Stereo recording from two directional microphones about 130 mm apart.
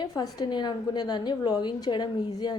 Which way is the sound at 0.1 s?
30° left (ahead or behind).